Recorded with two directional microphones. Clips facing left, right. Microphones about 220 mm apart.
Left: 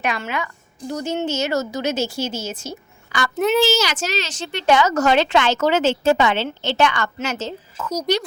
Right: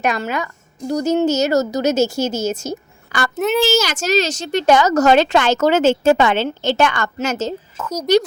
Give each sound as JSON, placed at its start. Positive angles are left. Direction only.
{"t": 0.0, "sound": "a woman's voice", "side_deg": -40}
{"t": 3.3, "sound": "a child's voice", "side_deg": 0}
{"t": 3.7, "sound": "a woman's voice", "side_deg": -45}